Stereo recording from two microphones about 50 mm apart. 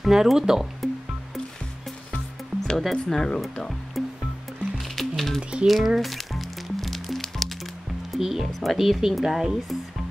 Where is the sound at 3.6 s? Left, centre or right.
Centre.